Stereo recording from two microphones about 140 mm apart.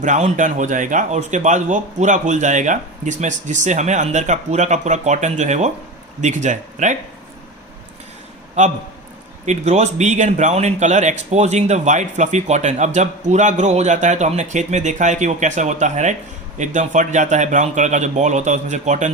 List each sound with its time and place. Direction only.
0.0 s speech: 60° right (ahead or behind)
8.6 s speech: 60° right (ahead or behind)